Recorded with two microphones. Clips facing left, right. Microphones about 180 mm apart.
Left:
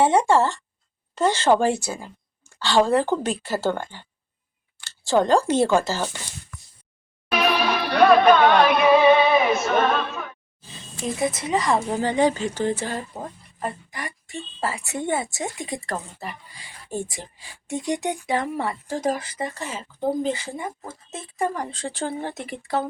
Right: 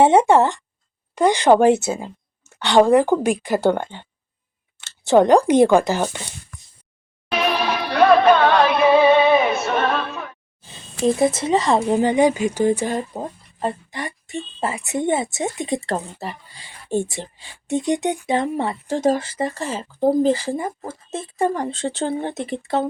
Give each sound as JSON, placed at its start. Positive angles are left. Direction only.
{"t": 0.0, "sound": "speech", "side_deg": -20}
{"t": 8.2, "sound": "a sound", "side_deg": -30}
{"t": 11.0, "sound": "speech", "side_deg": -30}
{"t": 13.1, "sound": "speech", "side_deg": -30}